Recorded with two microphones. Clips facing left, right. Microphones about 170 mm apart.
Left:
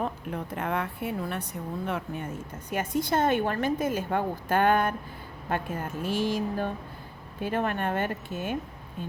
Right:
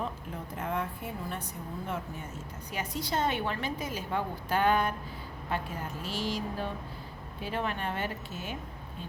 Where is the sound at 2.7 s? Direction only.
50° left (ahead or behind).